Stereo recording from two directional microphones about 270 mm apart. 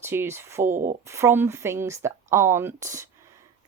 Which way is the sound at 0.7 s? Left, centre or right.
Right.